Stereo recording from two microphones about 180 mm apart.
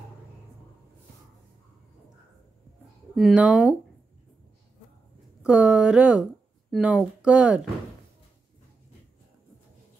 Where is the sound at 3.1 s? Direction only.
5° right (ahead or behind).